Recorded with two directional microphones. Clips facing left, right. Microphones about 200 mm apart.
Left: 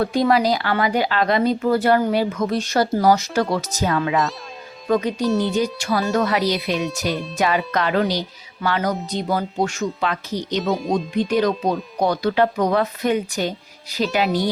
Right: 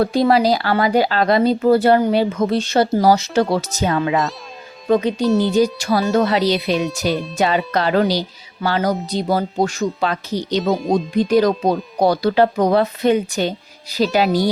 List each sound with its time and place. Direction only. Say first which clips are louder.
0.0 s speech: right 3 dB; 30° right (ahead or behind)
5.2 s speech: right 3 dB; centre (ahead or behind)
5.5 s speech: right 5 dB; 35° right (ahead or behind)
10.6 s speech: right 3 dB; centre (ahead or behind)
10.9 s speech: right 6 dB; 40° right (ahead or behind)